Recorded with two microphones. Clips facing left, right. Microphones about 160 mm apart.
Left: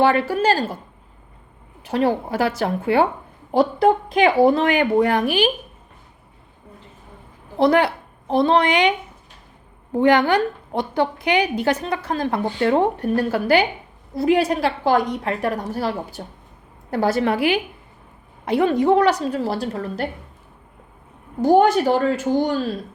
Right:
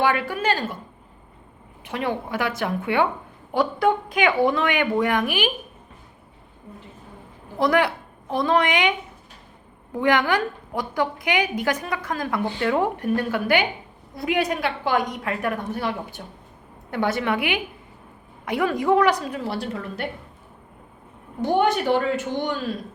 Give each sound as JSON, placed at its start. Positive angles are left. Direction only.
{"t": 0.0, "sound": "a woman's voice", "side_deg": 30}
{"t": 1.9, "sound": "a woman's voice", "side_deg": 35}
{"t": 7.6, "sound": "a woman's voice", "side_deg": 30}
{"t": 9.9, "sound": "a woman's voice", "side_deg": 30}
{"t": 21.4, "sound": "a woman's voice", "side_deg": 40}